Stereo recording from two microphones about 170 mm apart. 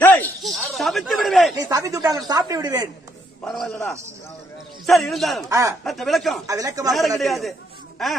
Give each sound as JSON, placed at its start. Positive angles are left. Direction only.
{"t": 0.0, "sound": "snake", "side_deg": 10}
{"t": 0.4, "sound": "snake", "side_deg": 0}
{"t": 1.7, "sound": "speech", "side_deg": -20}
{"t": 3.4, "sound": "speech", "side_deg": 5}
{"t": 5.5, "sound": "speech", "side_deg": -20}
{"t": 5.9, "sound": "speech", "side_deg": 0}
{"t": 6.4, "sound": "speech", "side_deg": -20}
{"t": 7.2, "sound": "speech", "side_deg": 0}